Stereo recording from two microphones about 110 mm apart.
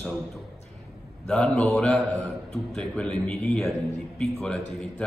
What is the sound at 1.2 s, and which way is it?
A man's voice, 10° left (ahead or behind).